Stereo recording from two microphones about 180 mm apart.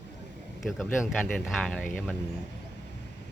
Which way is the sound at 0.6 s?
Centre (ahead or behind).